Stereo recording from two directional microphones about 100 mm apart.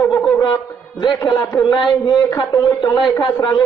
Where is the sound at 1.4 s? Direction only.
5° left (ahead or behind).